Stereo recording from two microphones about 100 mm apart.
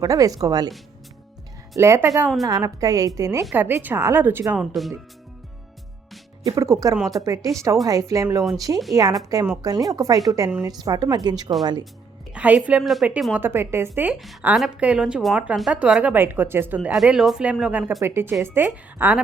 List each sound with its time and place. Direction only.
0.0 s speech: 35° right (ahead or behind)
1.7 s speech: 25° right (ahead or behind)
3.5 s speech: 20° right (ahead or behind)
4.5 s speech: centre (ahead or behind)
6.4 s a woman's voice: 35° right (ahead or behind)
12.3 s speech: 15° right (ahead or behind)
12.8 s speech: centre (ahead or behind)
13.3 s speech: 20° right (ahead or behind)
14.1 s speech: centre (ahead or behind); by 16.9 s 20° right (ahead or behind)
16.9 s speech: 5° right (ahead or behind)